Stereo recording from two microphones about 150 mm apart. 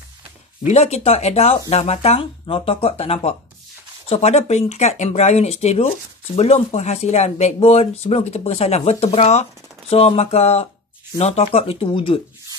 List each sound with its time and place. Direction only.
0.7 s speech: 45° left (ahead or behind)